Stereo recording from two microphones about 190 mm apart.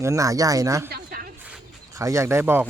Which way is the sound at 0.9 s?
50° right (ahead or behind).